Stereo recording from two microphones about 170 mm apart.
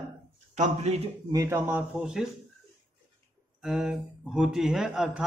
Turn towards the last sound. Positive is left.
turn(degrees=0)  # may be behind; listen again after turning